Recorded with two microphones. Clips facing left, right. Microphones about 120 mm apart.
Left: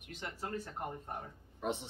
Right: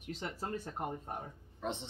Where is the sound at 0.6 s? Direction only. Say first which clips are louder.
Right 2 dB; 15° right (ahead or behind).